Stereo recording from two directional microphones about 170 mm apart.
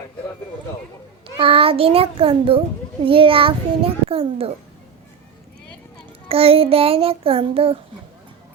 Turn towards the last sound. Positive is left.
turn(degrees=-35)  # may be behind; listen again after turning